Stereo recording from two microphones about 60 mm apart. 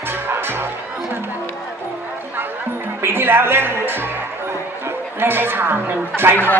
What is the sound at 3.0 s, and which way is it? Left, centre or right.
Speech, right.